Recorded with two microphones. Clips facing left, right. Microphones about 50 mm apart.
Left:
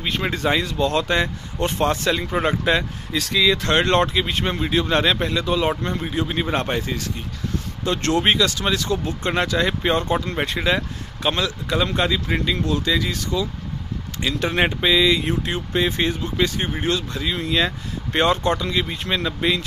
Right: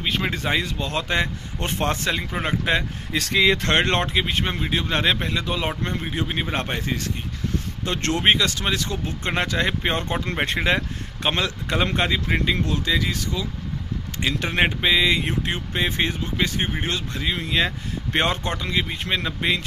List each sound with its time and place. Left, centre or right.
0.0 s speech: centre
0.3 s speech: centre
1.7 s speech: right
10.4 s speech: right
11.2 s speech: right